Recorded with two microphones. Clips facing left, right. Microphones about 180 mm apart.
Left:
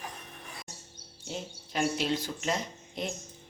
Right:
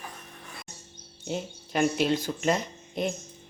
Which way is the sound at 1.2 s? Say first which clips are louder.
Right 6 dB; 55° right (ahead or behind).